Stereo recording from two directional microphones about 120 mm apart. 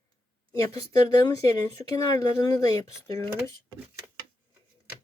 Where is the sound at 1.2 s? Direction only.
35° left (ahead or behind).